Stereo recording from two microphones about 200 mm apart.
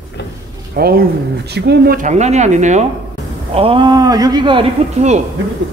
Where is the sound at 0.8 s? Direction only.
50° right (ahead or behind); by 4.6 s 20° right (ahead or behind).